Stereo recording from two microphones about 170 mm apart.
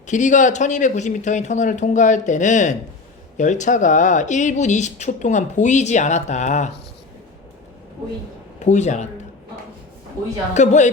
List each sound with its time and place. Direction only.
0.1 s speech: 45° left (ahead or behind)
8.5 s speech: 45° left (ahead or behind)
10.5 s speech: 45° left (ahead or behind)